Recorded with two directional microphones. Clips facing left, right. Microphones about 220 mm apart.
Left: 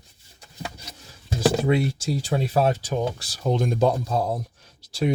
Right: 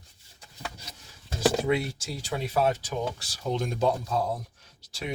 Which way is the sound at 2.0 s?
35° left (ahead or behind).